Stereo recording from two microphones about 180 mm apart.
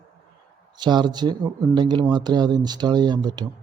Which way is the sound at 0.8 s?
25° right (ahead or behind).